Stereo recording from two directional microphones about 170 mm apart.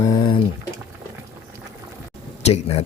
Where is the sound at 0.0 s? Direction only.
20° left (ahead or behind).